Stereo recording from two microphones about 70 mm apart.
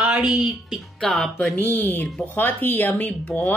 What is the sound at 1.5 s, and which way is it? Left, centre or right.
A woman's voice, left.